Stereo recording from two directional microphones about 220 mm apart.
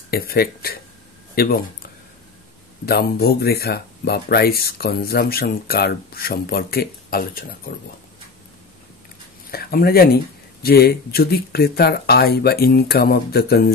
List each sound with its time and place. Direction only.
0.1 s speech: 45° left (ahead or behind)
2.8 s speech: 45° left (ahead or behind)
9.5 s speech: 45° left (ahead or behind)